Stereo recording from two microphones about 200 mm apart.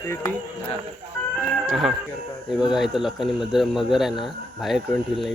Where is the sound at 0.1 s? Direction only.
15° left (ahead or behind).